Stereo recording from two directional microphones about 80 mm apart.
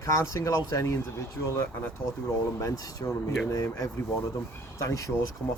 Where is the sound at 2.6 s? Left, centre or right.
Left.